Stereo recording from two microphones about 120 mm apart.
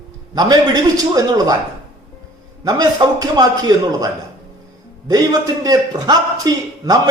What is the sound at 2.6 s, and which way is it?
A man's voice, 35° right (ahead or behind).